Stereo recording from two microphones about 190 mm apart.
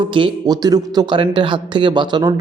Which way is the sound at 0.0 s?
25° right (ahead or behind).